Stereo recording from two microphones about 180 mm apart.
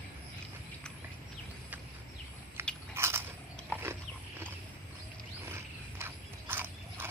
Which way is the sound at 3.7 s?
10° right (ahead or behind).